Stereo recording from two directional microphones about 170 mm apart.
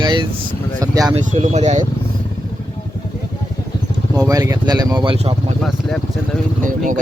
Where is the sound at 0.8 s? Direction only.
20° right (ahead or behind).